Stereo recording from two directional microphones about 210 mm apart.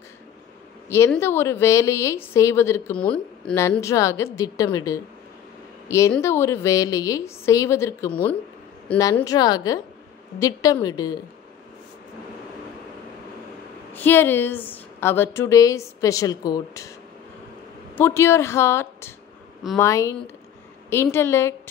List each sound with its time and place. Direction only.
0.8 s a woman's voice: 10° left (ahead or behind)
13.9 s a woman's voice: 10° left (ahead or behind)
17.9 s a woman's voice: 10° left (ahead or behind)